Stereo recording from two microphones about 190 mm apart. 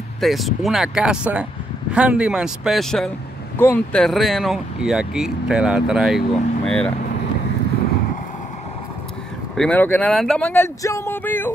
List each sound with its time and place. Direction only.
0.2 s speech: centre (ahead or behind)
9.6 s speech: 10° left (ahead or behind)